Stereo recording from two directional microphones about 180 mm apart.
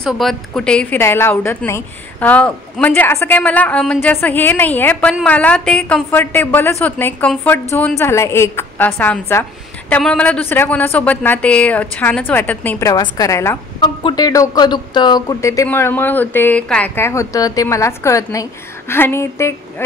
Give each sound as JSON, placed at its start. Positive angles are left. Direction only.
{"t": 0.0, "sound": "speech", "side_deg": 0}